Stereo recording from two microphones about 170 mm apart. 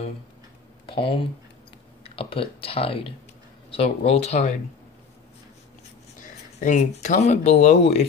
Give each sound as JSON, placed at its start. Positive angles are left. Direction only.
{"t": 0.8, "sound": "speech", "side_deg": 30}
{"t": 6.2, "sound": "speech", "side_deg": 45}